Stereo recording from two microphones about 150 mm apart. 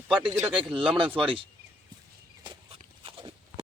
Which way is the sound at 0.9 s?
35° right (ahead or behind).